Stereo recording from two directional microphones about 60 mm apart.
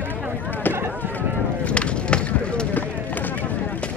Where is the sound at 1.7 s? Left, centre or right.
Centre.